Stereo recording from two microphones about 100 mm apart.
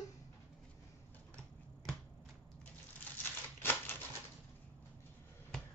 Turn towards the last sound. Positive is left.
turn(degrees=20)  # may be behind; listen again after turning